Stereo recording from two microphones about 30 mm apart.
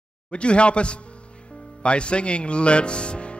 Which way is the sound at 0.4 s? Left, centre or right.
Left.